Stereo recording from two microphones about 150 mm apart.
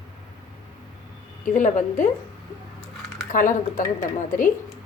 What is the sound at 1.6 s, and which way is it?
Speech, 55° left (ahead or behind).